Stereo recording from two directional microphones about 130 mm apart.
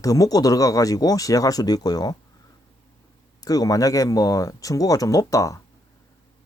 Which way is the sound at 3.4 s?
30° left (ahead or behind).